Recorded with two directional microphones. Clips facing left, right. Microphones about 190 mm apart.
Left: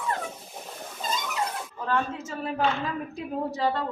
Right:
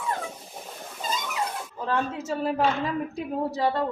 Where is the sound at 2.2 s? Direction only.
35° right (ahead or behind).